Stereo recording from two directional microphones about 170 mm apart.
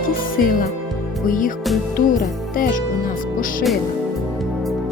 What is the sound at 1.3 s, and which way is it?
Music, 50° left (ahead or behind).